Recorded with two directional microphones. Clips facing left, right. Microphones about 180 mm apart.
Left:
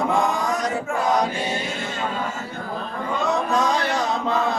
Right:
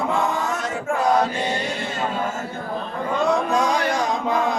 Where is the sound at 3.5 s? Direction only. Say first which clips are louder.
Right 1 dB; 10° right (ahead or behind).